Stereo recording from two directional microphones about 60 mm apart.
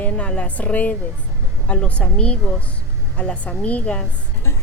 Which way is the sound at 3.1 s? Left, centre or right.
Centre.